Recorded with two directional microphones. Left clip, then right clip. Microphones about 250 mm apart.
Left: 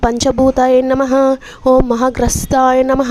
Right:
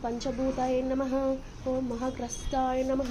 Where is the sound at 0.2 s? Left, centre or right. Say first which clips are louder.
Left 19 dB; left.